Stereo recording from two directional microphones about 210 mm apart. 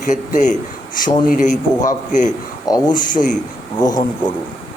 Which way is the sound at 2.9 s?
40° left (ahead or behind).